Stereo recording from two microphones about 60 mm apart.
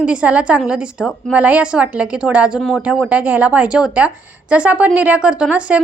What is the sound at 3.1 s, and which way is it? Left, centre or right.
Speech, right.